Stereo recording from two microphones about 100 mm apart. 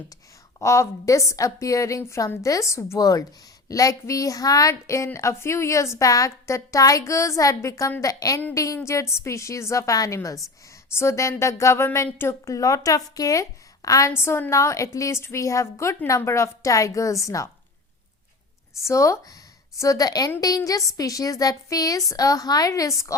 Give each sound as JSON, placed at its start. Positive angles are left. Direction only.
{"t": 0.6, "sound": "a woman's voice", "side_deg": 30}
{"t": 10.9, "sound": "a sound", "side_deg": 30}
{"t": 11.9, "sound": "a woman's voice", "side_deg": 25}
{"t": 18.9, "sound": "a woman's voice", "side_deg": 30}